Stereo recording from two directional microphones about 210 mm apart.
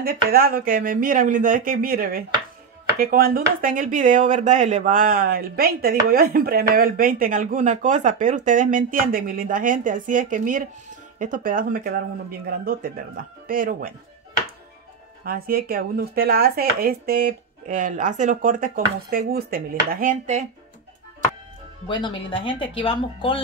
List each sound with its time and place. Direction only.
0.0 s speech: 45° right (ahead or behind)
15.2 s speech: 45° right (ahead or behind)
21.8 s speech: 20° left (ahead or behind)